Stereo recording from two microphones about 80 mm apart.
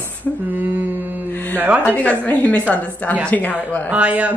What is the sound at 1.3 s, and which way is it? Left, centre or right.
Music, left.